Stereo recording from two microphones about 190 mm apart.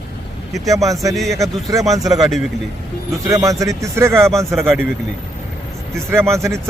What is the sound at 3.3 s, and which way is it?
Speech, 15° right (ahead or behind).